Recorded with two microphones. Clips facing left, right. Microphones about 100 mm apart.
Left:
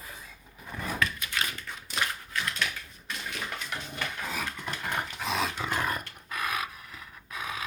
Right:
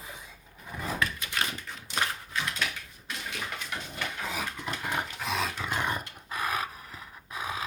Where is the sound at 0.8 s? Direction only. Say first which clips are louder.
Even; 30° right (ahead or behind).